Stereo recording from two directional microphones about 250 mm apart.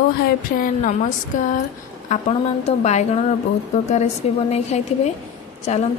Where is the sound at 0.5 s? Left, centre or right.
Left.